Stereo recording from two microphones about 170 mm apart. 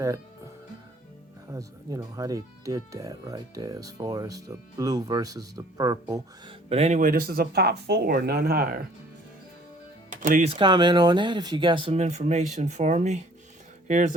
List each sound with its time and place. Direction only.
1.5 s speech: 20° right (ahead or behind)
6.7 s speech: 40° right (ahead or behind); by 8.8 s 60° right (ahead or behind)
10.1 s music: 50° right (ahead or behind)
10.5 s speech: 25° right (ahead or behind); by 14.1 s 45° right (ahead or behind)